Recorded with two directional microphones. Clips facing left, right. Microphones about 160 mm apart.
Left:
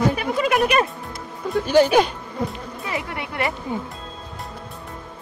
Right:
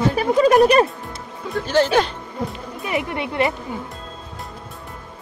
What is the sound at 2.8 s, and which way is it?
Speech, 20° right (ahead or behind).